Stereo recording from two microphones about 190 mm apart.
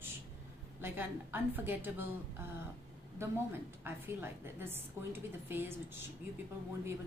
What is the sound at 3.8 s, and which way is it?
A woman's voice, 10° right (ahead or behind).